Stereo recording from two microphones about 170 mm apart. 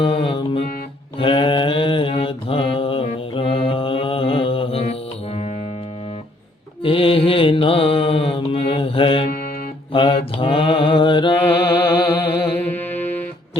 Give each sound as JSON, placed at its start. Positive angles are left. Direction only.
{"t": 0.0, "sound": "music", "side_deg": 30}
{"t": 1.2, "sound": "mantra", "side_deg": 30}
{"t": 6.8, "sound": "mantra", "side_deg": 30}
{"t": 12.5, "sound": "music", "side_deg": 10}